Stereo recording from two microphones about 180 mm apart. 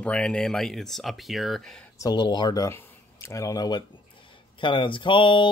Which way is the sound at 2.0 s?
25° left (ahead or behind).